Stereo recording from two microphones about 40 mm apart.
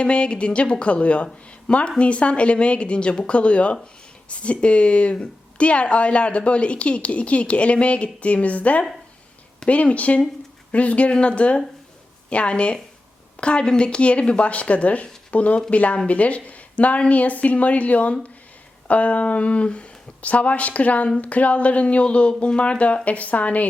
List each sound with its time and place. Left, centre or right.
0.0 s a woman's voice: left